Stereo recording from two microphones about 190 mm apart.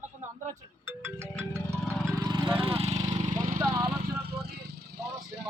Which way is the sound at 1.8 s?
5° left (ahead or behind).